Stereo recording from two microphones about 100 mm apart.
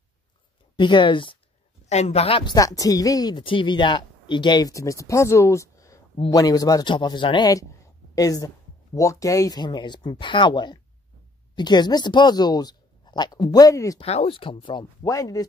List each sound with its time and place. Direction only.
0.7 s speech: 50° left (ahead or behind)
1.9 s a woman's voice: 90° left
2.4 s speech: 35° left (ahead or behind)
3.4 s speech: 55° left (ahead or behind)
8.1 s a woman's voice: 35° left (ahead or behind)
13.9 s speech: 80° left; by 14.9 s 55° left (ahead or behind)
15.0 s speech: 35° left (ahead or behind)